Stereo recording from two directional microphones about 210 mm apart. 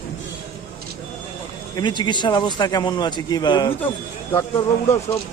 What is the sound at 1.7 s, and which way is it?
A man's voice, 20° left (ahead or behind).